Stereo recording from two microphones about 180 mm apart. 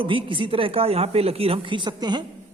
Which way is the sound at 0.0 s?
30° right (ahead or behind).